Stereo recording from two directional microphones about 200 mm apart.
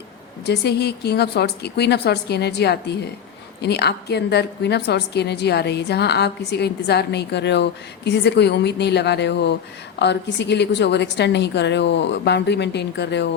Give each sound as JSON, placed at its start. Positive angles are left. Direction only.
{"t": 0.4, "sound": "a woman's voice", "side_deg": 55}